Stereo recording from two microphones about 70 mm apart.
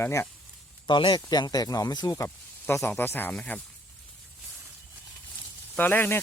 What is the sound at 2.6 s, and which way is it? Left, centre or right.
Speech, left.